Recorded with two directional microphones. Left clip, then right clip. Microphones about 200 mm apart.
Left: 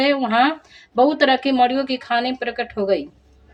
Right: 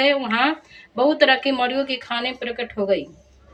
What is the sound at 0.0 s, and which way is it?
A woman's voice, 55° left (ahead or behind).